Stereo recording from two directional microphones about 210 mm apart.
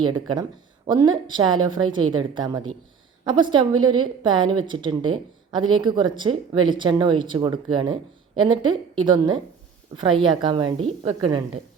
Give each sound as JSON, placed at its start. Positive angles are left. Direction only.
{"t": 0.0, "sound": "a woman's voice", "side_deg": -20}